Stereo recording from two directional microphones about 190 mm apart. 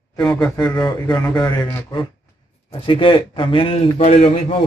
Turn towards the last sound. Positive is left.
turn(degrees=30)  # may be behind; listen again after turning